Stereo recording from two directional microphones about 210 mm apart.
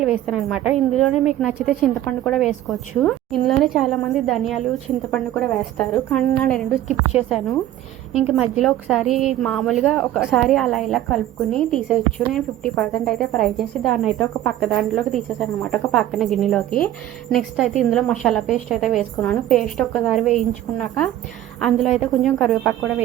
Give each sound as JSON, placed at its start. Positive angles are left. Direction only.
{"t": 0.0, "sound": "a woman's voice", "side_deg": 0}
{"t": 8.3, "sound": "a woman's voice", "side_deg": 0}